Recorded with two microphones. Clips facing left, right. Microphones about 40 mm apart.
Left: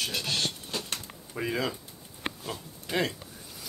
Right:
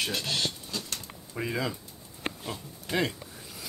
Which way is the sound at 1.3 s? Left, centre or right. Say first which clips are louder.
Left 1 dB; centre.